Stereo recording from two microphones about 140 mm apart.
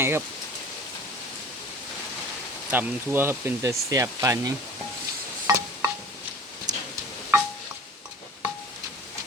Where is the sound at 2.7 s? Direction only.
15° right (ahead or behind).